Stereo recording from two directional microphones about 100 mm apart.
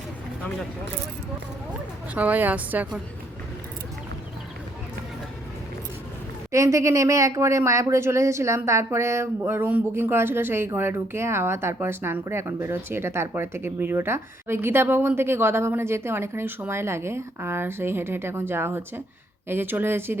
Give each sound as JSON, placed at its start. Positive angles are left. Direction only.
{"t": 2.1, "sound": "a woman's voice", "side_deg": -15}
{"t": 6.5, "sound": "speech", "side_deg": -30}